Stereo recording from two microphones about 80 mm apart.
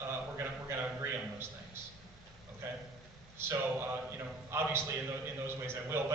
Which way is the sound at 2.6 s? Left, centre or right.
Right.